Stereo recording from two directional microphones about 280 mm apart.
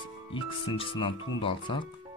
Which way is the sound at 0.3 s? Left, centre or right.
Centre.